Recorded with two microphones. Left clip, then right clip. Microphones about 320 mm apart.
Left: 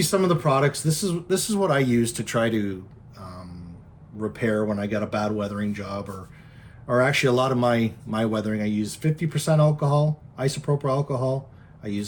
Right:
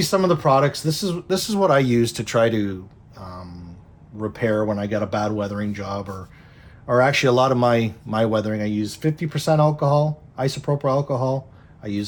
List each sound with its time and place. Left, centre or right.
0.0 s speech: centre
3.2 s a sound: centre
4.2 s speech: centre